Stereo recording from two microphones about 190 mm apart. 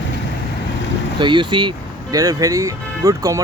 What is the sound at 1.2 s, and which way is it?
Speech, 25° right (ahead or behind).